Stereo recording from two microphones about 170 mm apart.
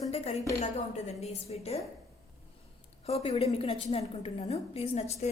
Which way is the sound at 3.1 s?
40° left (ahead or behind).